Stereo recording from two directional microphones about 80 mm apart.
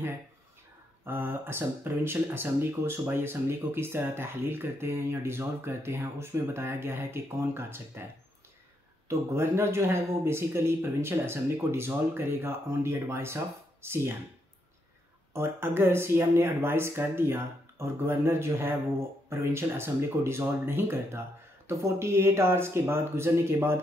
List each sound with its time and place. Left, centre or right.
1.0 s speech: right
15.3 s speech: right